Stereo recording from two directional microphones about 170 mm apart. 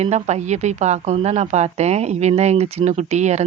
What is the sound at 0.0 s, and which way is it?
Speech, 40° right (ahead or behind).